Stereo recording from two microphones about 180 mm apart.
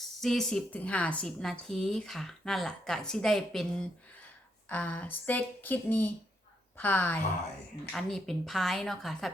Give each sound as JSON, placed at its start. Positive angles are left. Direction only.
{"t": 0.0, "sound": "a woman's voice", "side_deg": 0}